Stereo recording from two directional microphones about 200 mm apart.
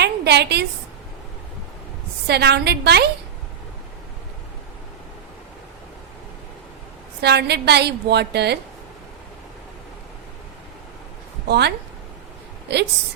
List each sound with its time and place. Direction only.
0.0 s a sound: 55° right (ahead or behind)
2.2 s a woman's voice: 55° right (ahead or behind)
7.2 s a woman's voice: 55° right (ahead or behind)
11.4 s a woman's voice: 55° right (ahead or behind)
12.7 s a woman's voice: 55° right (ahead or behind)